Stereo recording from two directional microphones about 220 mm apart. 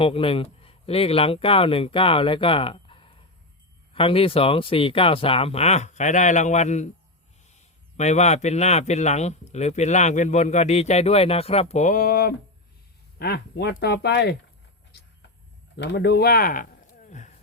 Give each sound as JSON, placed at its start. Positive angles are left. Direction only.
{"t": 0.0, "sound": "speech", "side_deg": 25}
{"t": 15.7, "sound": "speech", "side_deg": 50}
{"t": 17.1, "sound": "a sound", "side_deg": 35}